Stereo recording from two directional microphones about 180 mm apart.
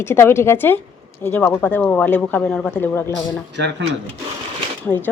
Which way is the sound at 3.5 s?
80° right.